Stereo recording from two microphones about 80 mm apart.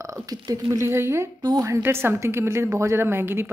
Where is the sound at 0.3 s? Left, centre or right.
Right.